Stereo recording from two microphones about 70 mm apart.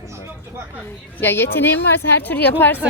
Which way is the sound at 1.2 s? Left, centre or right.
Left.